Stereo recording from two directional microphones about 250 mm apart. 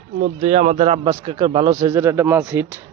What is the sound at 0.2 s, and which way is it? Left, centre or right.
A man's voice, right.